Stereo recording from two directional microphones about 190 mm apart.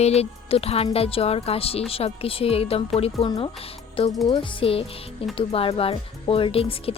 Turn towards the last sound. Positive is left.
turn(degrees=30)  # may be behind; listen again after turning